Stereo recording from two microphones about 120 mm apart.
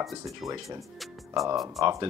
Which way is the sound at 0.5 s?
25° right (ahead or behind).